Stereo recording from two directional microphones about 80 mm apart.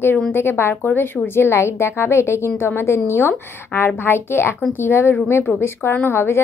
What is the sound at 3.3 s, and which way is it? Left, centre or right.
Speech, left.